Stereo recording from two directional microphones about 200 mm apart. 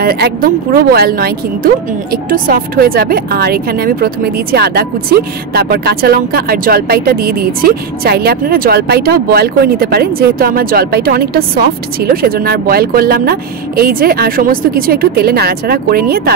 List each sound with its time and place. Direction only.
0.0 s speech: 50° right (ahead or behind)